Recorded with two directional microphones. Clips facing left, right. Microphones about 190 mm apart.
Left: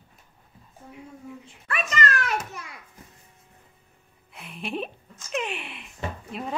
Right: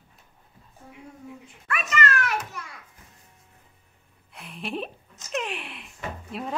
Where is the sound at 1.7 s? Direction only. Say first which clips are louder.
Even; 35° left (ahead or behind).